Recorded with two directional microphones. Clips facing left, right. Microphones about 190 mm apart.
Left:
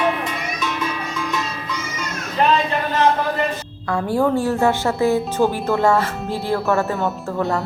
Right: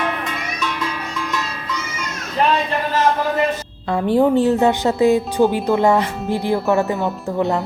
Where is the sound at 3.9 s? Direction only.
20° right (ahead or behind).